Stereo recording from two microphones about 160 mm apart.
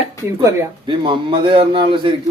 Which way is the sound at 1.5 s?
35° right (ahead or behind).